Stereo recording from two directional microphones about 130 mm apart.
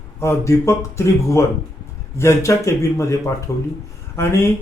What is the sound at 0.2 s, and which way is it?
Speech, 20° left (ahead or behind).